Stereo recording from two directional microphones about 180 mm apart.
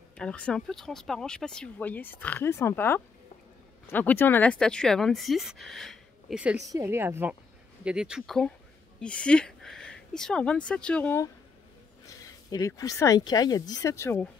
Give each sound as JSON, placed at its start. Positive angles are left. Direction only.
{"t": 0.2, "sound": "speech", "side_deg": 5}
{"t": 6.6, "sound": "speech", "side_deg": -15}
{"t": 12.4, "sound": "speech", "side_deg": 20}